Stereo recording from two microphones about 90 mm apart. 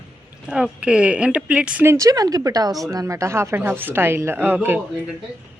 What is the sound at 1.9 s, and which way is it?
A woman's voice, 35° right (ahead or behind).